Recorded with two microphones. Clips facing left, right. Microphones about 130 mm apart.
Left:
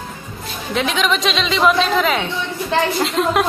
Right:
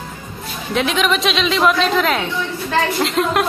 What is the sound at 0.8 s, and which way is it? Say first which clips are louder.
A woman's voice: right 1 dB; centre (ahead or behind).